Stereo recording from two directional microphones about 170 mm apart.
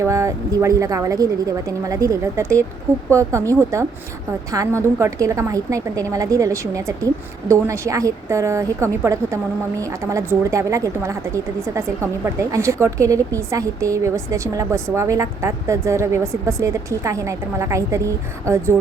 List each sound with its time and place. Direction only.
0.0 s a woman's voice: 20° right (ahead or behind)